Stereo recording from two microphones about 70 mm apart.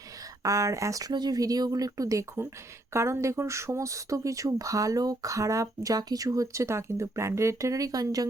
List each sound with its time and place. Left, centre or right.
0.4 s speech: right
1.1 s speech: right